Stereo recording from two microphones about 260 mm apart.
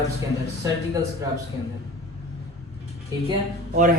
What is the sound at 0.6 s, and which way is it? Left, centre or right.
Speech, centre.